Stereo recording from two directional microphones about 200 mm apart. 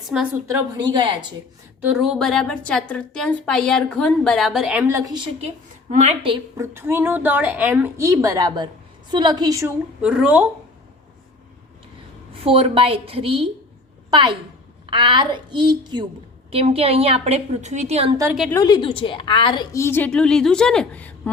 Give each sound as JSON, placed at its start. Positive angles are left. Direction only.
{"t": 0.1, "sound": "a woman's voice", "side_deg": -5}
{"t": 0.8, "sound": "a woman's voice", "side_deg": -20}
{"t": 1.9, "sound": "a woman's voice", "side_deg": 0}
{"t": 6.6, "sound": "a woman's voice", "side_deg": -10}
{"t": 10.0, "sound": "a woman's voice", "side_deg": -5}
{"t": 12.5, "sound": "a woman's voice", "side_deg": -25}
{"t": 18.5, "sound": "a woman's voice", "side_deg": 20}